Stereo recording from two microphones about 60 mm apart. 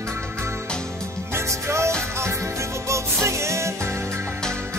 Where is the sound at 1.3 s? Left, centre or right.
Right.